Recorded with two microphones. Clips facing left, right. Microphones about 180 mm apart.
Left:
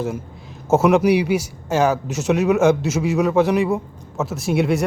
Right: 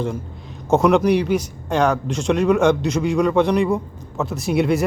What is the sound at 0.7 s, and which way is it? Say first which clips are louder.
Speech: even; 5° left (ahead or behind).